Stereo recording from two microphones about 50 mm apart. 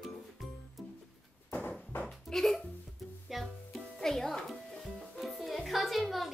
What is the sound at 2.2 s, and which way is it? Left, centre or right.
Hiccup, centre.